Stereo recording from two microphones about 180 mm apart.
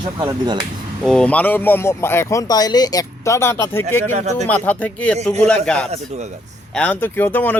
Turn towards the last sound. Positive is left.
turn(degrees=10)  # may be behind; listen again after turning